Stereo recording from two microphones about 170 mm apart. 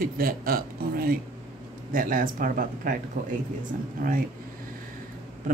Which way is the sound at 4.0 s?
55° right (ahead or behind).